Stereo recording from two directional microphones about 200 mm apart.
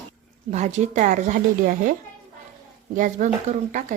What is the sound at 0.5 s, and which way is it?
Speech, 35° right (ahead or behind).